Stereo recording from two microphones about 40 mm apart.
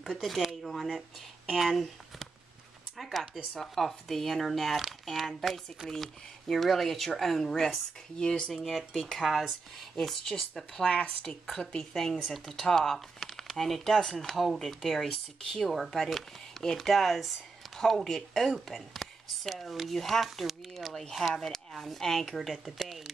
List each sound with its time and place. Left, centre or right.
0.2 s speech: centre; by 8.5 s left
8.6 s speech: centre
10.8 s speech: left
11.7 s speech: centre
22.8 s a sound: centre